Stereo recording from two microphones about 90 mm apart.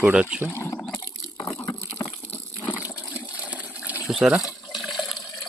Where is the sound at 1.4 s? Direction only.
30° left (ahead or behind).